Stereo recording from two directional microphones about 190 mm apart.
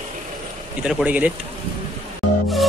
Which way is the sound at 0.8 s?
5° right (ahead or behind).